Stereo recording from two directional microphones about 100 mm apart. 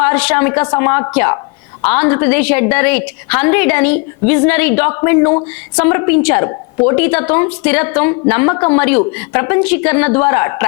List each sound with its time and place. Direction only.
0.0 s a woman's voice: 20° left (ahead or behind)